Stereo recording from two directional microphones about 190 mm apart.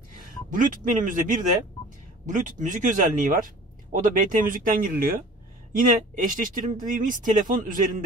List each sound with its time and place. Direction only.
0.2 s a man's voice: 45° right (ahead or behind)